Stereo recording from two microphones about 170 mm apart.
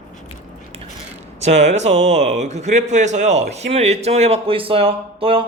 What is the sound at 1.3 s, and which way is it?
A man's voice, 40° right (ahead or behind).